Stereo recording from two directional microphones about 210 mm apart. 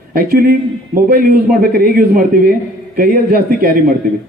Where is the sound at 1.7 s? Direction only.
45° right (ahead or behind).